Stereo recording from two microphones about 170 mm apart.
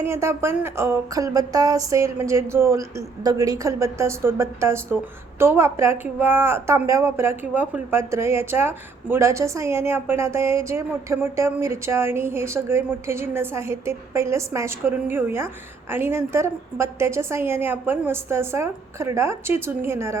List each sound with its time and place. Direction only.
0.0 s a woman's voice: 15° right (ahead or behind)